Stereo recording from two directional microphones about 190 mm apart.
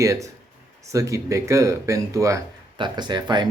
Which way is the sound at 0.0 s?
15° right (ahead or behind).